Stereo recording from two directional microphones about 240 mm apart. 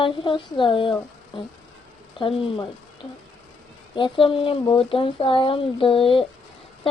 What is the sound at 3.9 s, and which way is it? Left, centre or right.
Child singing, left.